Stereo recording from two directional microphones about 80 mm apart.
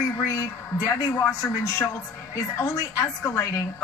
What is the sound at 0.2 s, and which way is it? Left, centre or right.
A woman's voice, left.